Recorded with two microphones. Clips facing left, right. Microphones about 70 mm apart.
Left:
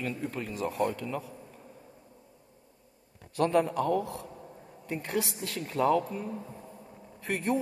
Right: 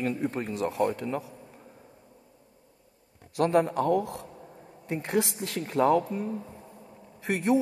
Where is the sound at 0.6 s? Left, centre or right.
Right.